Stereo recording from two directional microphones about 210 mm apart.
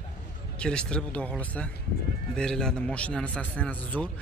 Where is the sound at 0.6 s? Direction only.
5° left (ahead or behind).